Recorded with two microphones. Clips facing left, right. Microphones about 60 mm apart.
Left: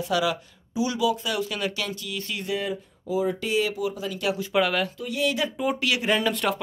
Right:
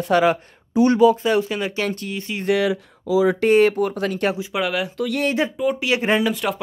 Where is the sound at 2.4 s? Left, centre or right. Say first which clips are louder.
Right 11 dB; right.